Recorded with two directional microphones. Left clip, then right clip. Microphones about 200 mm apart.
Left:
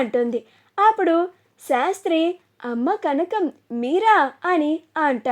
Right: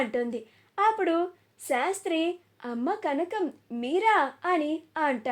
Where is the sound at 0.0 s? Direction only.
40° left (ahead or behind).